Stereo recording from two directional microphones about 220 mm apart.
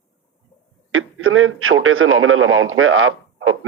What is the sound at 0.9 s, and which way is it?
Speech, 70° right (ahead or behind).